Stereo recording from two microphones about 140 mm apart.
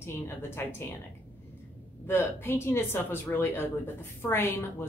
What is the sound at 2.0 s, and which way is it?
Speech, 15° left (ahead or behind).